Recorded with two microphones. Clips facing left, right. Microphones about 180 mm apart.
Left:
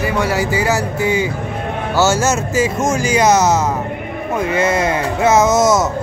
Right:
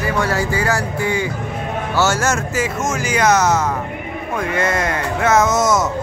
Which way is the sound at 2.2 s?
25° left (ahead or behind).